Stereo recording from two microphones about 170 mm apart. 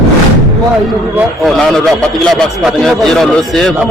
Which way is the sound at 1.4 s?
Centre (ahead or behind).